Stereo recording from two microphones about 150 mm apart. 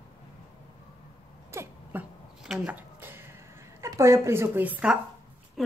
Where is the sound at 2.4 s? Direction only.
5° right (ahead or behind).